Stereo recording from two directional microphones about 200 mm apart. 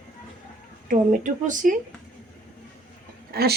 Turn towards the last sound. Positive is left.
turn(degrees=-50)  # may be behind; listen again after turning